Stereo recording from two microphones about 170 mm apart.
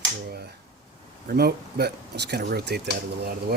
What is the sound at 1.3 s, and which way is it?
Speech, 65° right (ahead or behind).